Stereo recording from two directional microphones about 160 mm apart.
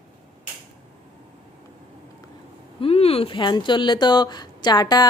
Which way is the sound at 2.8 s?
40° left (ahead or behind).